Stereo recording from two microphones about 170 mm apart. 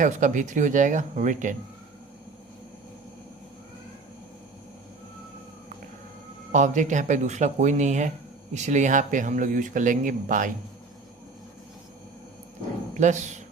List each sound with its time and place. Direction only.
0.0 s speech: 45° right (ahead or behind)
6.5 s speech: 45° right (ahead or behind)
13.0 s speech: 45° right (ahead or behind)